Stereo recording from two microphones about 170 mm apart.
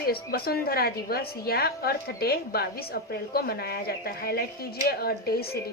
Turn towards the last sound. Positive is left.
turn(degrees=65)  # may be behind; listen again after turning